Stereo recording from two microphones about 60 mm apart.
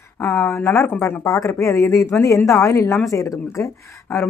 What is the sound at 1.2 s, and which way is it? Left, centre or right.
Speech, left.